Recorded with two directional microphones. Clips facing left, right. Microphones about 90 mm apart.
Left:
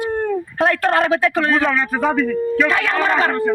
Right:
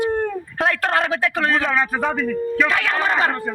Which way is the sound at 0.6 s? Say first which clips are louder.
Left 3 dB; 35° left (ahead or behind).